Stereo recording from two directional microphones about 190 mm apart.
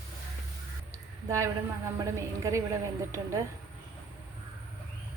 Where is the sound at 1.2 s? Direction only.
15° right (ahead or behind).